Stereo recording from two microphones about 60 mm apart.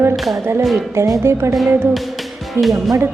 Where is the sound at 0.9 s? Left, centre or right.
Right.